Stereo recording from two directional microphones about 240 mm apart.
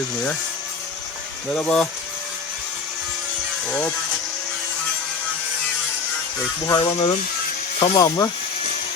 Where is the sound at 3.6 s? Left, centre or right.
Centre.